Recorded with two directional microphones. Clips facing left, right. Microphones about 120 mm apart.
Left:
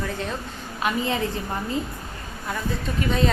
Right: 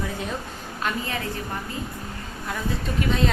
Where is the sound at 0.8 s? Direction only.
20° left (ahead or behind).